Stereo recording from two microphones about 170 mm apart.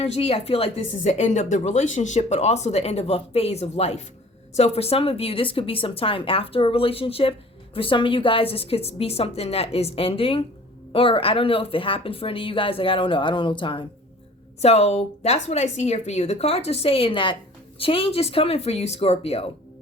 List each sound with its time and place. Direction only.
0.0 s speech: 35° left (ahead or behind)
14.6 s speech: 40° left (ahead or behind)